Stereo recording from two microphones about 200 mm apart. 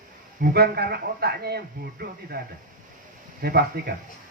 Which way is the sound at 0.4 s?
50° right (ahead or behind).